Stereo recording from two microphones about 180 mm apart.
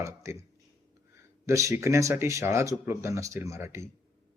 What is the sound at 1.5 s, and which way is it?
A man's voice, 15° right (ahead or behind).